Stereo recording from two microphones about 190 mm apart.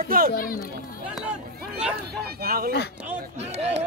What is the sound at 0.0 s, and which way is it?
Speech, 50° right (ahead or behind).